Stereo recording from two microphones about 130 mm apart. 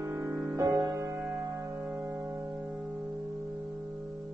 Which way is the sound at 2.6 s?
5° right (ahead or behind).